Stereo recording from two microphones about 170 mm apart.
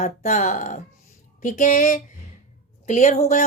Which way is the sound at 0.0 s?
45° left (ahead or behind).